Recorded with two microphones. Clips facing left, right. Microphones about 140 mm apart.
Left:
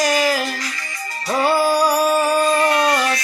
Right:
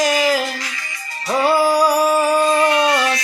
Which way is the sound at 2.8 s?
40° left (ahead or behind).